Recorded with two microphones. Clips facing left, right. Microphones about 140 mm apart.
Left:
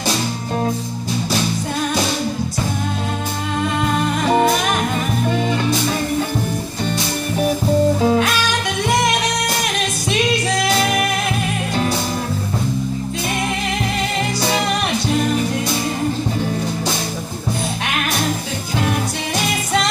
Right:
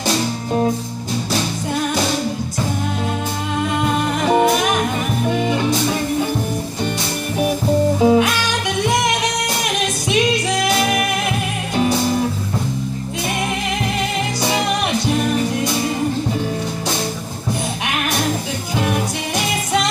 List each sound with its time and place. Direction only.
5.3 s music: 15° right (ahead or behind)
8.0 s music: 15° right (ahead or behind)